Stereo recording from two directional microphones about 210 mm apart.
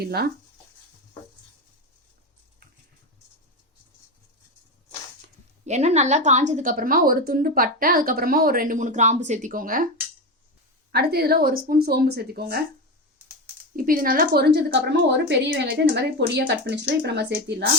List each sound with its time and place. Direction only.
0.0 s a woman's voice: 50° right (ahead or behind)
5.6 s a woman's voice: 35° right (ahead or behind)
10.9 s a woman's voice: 50° right (ahead or behind)
13.7 s a woman's voice: 45° right (ahead or behind)